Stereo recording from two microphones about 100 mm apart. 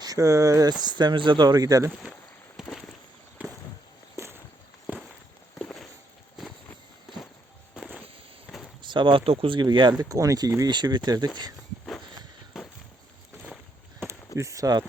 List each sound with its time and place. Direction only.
0.0 s speech: 35° right (ahead or behind)
2.6 s a sound: 5° right (ahead or behind)
3.4 s a sound: 15° right (ahead or behind)
4.2 s walk: 30° right (ahead or behind)
5.5 s walk: 10° left (ahead or behind)
7.8 s vehicle: 5° right (ahead or behind)
8.4 s a sound: 5° left (ahead or behind)
8.8 s speech: 50° right (ahead or behind)
10.0 s speech: 35° right (ahead or behind)
10.7 s speech: 50° right (ahead or behind)
14.3 s speech: 30° right (ahead or behind)